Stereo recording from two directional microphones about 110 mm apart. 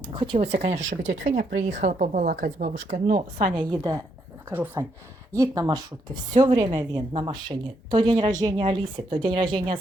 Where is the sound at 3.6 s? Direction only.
35° right (ahead or behind).